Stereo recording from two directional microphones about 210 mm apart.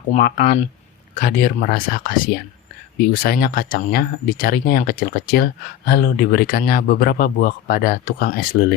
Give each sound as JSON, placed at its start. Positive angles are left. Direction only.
{"t": 0.1, "sound": "speech", "side_deg": 40}